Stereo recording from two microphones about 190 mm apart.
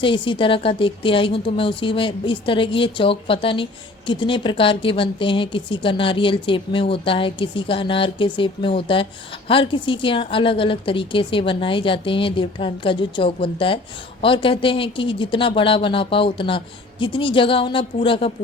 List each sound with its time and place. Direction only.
0.0 s a woman's voice: 25° left (ahead or behind)